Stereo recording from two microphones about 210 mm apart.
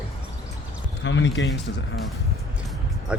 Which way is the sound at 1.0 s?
60° left (ahead or behind).